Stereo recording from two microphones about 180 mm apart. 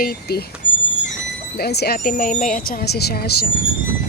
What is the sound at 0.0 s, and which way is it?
Speech, 60° left (ahead or behind).